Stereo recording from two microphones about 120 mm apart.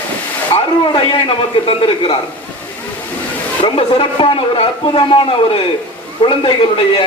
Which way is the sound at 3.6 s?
50° left (ahead or behind).